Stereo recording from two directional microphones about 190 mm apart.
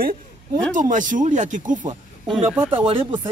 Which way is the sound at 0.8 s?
45° right (ahead or behind).